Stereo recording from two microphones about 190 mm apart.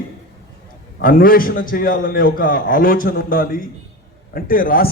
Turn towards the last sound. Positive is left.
turn(degrees=50)  # may be behind; listen again after turning